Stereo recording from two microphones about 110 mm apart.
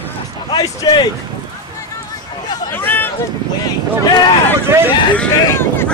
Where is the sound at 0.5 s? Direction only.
45° left (ahead or behind).